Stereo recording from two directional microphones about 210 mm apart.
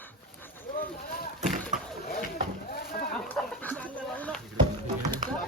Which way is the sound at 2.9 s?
40° left (ahead or behind).